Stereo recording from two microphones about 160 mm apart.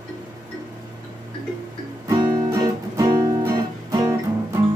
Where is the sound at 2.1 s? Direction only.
20° right (ahead or behind).